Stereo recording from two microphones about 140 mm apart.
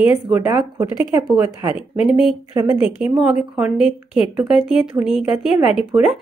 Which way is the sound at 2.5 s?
25° right (ahead or behind).